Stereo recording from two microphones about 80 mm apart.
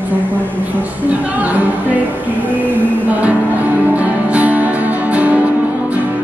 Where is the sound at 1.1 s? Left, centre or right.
Centre.